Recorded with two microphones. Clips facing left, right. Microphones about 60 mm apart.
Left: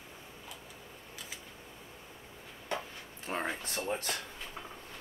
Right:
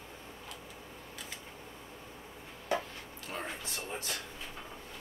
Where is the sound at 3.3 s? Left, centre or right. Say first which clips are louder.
Left 5 dB; left.